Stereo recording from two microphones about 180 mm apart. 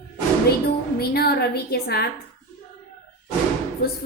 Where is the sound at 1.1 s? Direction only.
60° left (ahead or behind).